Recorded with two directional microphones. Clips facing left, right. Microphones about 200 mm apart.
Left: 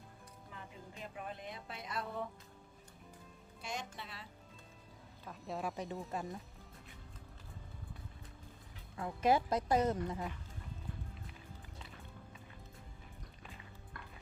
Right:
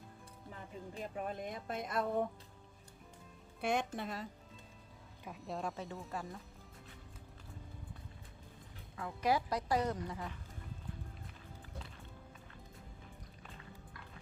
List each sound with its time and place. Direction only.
0.9 s a woman's voice: 45° right (ahead or behind)
3.6 s a woman's voice: 60° right (ahead or behind)
5.2 s speech: centre (ahead or behind)
5.7 s speech: 15° left (ahead or behind)
9.0 s speech: 25° left (ahead or behind)